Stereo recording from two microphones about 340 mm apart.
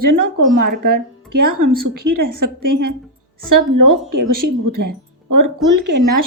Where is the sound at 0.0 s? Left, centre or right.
Right.